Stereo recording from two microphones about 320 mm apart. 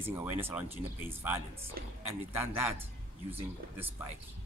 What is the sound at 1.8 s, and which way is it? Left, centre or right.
Speech, right.